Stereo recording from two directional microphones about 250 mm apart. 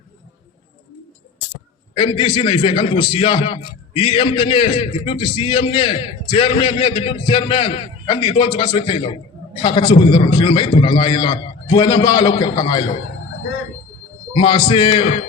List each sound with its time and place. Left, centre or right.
2.0 s a man's voice: centre
14.3 s a man's voice: centre